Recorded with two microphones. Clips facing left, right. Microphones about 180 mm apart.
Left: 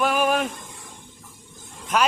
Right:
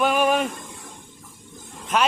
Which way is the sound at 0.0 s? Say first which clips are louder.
Right 1 dB; 5° left (ahead or behind).